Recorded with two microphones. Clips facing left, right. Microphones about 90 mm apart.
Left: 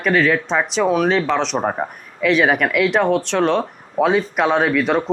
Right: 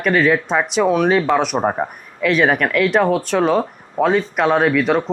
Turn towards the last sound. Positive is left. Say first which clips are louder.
# right 1 dB
turn(degrees=0)  # may be behind; listen again after turning